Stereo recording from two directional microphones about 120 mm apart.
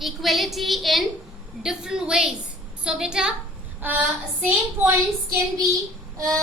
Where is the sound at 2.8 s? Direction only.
5° right (ahead or behind).